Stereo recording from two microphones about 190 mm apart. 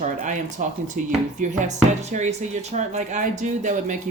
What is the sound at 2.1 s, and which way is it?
Speech, 40° right (ahead or behind).